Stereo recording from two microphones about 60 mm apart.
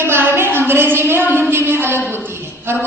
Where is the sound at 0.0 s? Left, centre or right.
Right.